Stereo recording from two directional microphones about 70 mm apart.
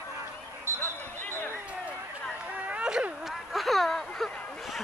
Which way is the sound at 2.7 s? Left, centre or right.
Centre.